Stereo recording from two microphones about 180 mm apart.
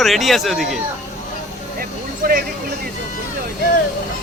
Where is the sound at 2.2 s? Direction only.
55° right (ahead or behind).